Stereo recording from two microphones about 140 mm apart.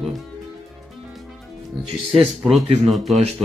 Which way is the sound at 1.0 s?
Centre (ahead or behind).